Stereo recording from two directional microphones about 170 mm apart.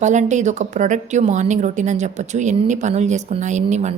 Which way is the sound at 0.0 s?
45° right (ahead or behind).